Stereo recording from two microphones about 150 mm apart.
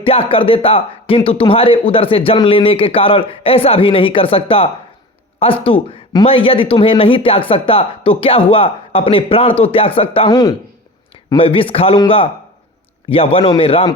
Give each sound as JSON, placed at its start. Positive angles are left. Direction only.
{"t": 0.0, "sound": "a man's voice", "side_deg": 40}
{"t": 11.3, "sound": "a man's voice", "side_deg": 40}